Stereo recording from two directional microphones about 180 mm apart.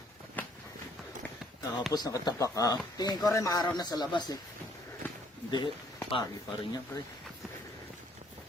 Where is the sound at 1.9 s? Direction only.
20° left (ahead or behind).